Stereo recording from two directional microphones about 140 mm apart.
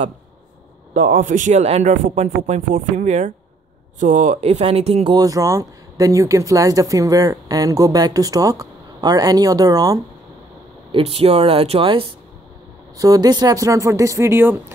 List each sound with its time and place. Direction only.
0.9 s a man's voice: 70° right (ahead or behind); by 5.1 s 45° right (ahead or behind)
5.1 s speech: 25° right (ahead or behind)
10.9 s speech: 45° right (ahead or behind)
12.9 s speech: 25° right (ahead or behind)